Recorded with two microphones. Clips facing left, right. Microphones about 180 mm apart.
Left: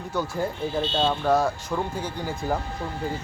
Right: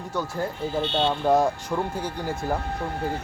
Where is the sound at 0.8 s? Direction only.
60° right (ahead or behind).